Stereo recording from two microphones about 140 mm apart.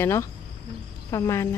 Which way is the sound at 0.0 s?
20° left (ahead or behind).